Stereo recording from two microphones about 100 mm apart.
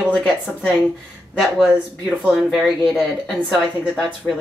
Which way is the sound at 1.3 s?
5° left (ahead or behind).